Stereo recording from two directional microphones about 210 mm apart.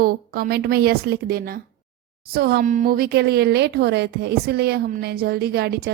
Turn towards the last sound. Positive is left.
turn(degrees=-50)  # may be behind; listen again after turning